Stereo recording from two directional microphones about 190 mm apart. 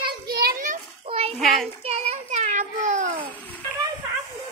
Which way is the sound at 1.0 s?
30° right (ahead or behind).